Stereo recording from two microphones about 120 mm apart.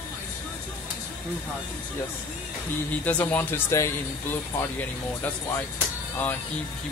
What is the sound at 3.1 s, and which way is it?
Speech, 10° left (ahead or behind).